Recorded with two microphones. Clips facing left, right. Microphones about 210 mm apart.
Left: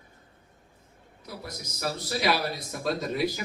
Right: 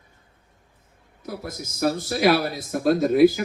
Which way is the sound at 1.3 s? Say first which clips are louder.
Right 7 dB; 50° right (ahead or behind).